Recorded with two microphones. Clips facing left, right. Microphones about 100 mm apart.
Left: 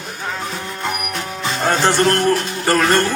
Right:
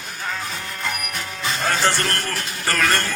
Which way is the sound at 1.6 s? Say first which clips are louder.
Left 7 dB; 20° left (ahead or behind).